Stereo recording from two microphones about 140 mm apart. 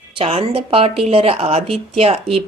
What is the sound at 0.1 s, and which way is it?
A woman's voice, 45° right (ahead or behind).